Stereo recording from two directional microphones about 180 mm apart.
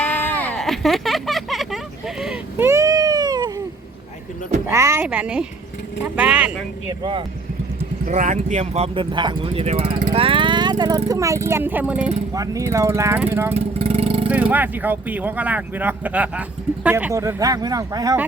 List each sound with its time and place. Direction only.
0.0 s vehicle: 10° left (ahead or behind)
2.2 s a sound: 10° right (ahead or behind)
4.6 s speech: 15° right (ahead or behind)
7.0 s speech: 30° right (ahead or behind)
8.0 s speech: 45° right (ahead or behind); by 13.5 s 10° right (ahead or behind)
13.5 s vehicle: 35° right (ahead or behind)
14.3 s speech: 10° right (ahead or behind)